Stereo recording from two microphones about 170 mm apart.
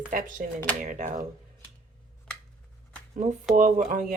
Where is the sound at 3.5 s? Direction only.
50° right (ahead or behind).